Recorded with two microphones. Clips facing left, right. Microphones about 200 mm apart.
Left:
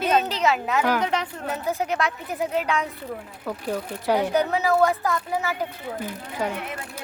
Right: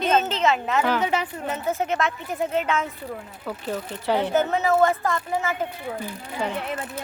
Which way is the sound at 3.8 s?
10° left (ahead or behind).